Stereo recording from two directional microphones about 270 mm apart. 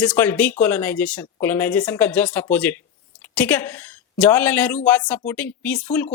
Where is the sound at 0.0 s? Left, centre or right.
Centre.